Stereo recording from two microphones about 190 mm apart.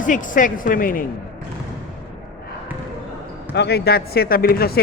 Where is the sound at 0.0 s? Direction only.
45° left (ahead or behind).